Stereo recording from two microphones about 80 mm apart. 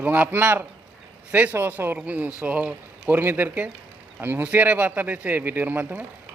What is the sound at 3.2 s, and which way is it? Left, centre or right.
Speech, right.